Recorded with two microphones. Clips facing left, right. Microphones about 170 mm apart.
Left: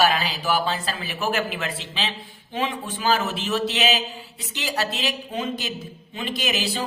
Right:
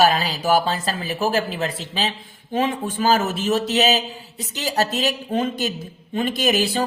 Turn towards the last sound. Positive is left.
turn(degrees=-50)  # may be behind; listen again after turning